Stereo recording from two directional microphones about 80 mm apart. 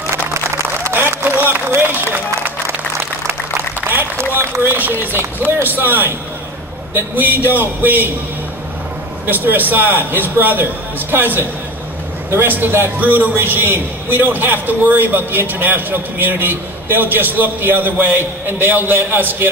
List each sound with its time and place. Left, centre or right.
0.8 s applause: right
3.8 s a man's voice: right
9.2 s a man's voice: right